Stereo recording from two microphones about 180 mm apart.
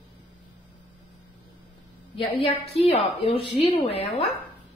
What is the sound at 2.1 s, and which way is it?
A woman's voice, 30° left (ahead or behind).